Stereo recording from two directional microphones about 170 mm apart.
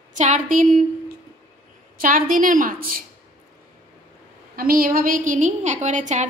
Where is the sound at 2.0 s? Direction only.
55° right (ahead or behind).